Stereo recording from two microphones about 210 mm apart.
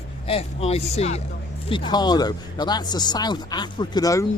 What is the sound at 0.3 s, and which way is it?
Speech, 30° left (ahead or behind).